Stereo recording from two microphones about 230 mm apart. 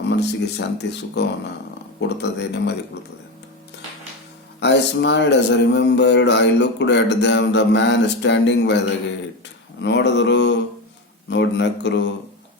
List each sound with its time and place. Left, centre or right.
0.2 s a man's voice: left
4.6 s a man's voice: left
9.8 s a man's voice: left